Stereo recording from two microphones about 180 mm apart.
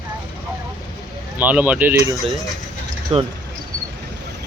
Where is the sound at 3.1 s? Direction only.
35° right (ahead or behind).